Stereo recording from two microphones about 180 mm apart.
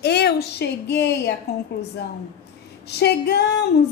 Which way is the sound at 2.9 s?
65° left (ahead or behind).